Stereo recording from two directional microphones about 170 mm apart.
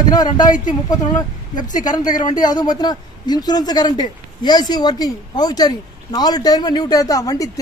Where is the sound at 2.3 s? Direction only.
25° left (ahead or behind).